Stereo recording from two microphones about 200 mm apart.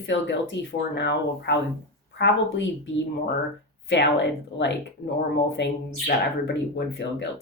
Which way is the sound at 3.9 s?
60° left (ahead or behind).